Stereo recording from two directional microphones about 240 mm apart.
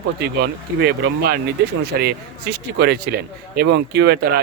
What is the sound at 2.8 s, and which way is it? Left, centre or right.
Speech, right.